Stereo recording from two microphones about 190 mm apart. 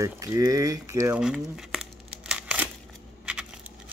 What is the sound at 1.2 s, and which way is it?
Crumpling, 5° right (ahead or behind).